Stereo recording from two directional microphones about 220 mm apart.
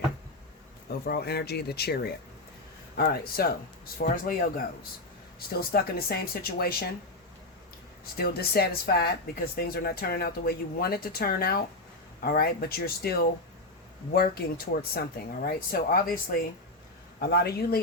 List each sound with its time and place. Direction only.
1.0 s speech: 45° left (ahead or behind)
8.1 s speech: 45° left (ahead or behind)